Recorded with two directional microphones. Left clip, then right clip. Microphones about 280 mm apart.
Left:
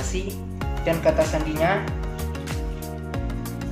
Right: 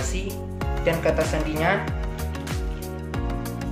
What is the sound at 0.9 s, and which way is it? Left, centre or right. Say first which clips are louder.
Music: even; right.